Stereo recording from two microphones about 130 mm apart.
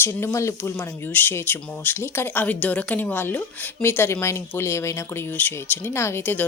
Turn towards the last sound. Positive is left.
turn(degrees=15)  # may be behind; listen again after turning